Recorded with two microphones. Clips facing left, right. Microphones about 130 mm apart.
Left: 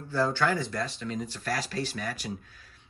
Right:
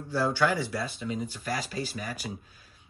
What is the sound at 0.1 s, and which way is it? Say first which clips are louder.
Speech: even; 10° right (ahead or behind).